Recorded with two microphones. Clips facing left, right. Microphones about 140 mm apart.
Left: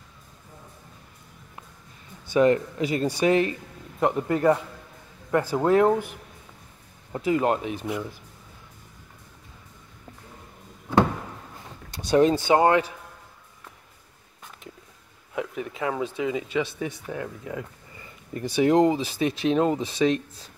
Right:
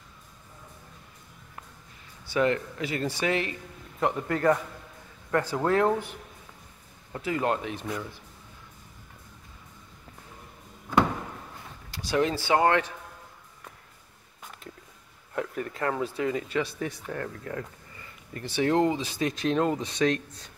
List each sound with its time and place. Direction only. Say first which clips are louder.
2.2 s speech: left 6 dB; 20° left (ahead or behind)
7.2 s speech: left 5 dB; 20° left (ahead or behind)
12.1 s speech: left 6 dB; 25° left (ahead or behind)
15.3 s speech: left 1 dB; 5° left (ahead or behind)
17.9 s a sound: left 7 dB; 15° left (ahead or behind)
18.9 s speech: left 4 dB; 10° left (ahead or behind)